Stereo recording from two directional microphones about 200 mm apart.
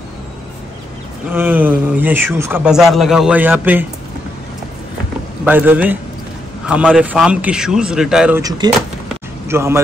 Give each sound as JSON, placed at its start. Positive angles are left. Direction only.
{"t": 1.3, "sound": "a man's voice", "side_deg": -10}
{"t": 5.4, "sound": "a man's voice", "side_deg": -10}
{"t": 8.4, "sound": "a man's voice", "side_deg": -20}